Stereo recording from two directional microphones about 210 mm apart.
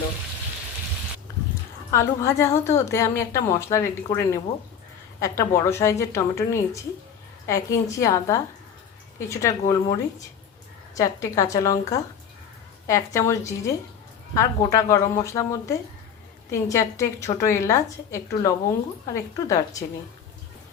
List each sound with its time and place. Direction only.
1.9 s a woman's voice: 15° left (ahead or behind)